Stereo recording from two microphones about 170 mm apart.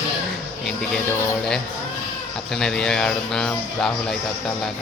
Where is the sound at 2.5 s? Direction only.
5° left (ahead or behind).